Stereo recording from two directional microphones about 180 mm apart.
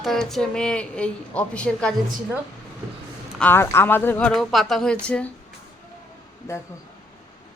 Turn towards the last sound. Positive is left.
turn(degrees=15)  # may be behind; listen again after turning